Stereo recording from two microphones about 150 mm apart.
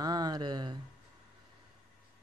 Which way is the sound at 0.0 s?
25° right (ahead or behind).